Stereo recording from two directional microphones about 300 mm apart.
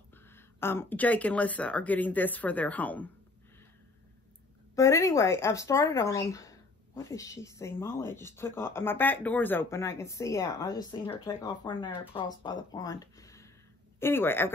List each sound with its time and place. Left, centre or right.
0.6 s speech: centre
4.7 s speech: centre